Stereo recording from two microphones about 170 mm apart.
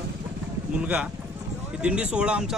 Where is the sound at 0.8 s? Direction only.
10° right (ahead or behind).